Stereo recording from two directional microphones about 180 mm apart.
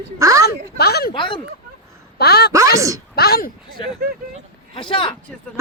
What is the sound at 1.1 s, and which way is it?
Speech, 25° left (ahead or behind).